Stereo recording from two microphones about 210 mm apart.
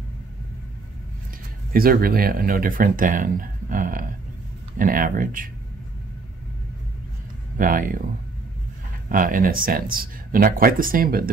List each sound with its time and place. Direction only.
1.7 s speech: 45° right (ahead or behind)
7.5 s speech: 40° right (ahead or behind)
9.1 s speech: 40° right (ahead or behind)